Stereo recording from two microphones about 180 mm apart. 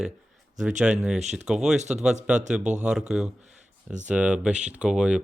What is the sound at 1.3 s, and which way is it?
Speech, 5° right (ahead or behind).